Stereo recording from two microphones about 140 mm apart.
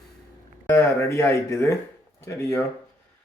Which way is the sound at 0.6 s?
20° left (ahead or behind).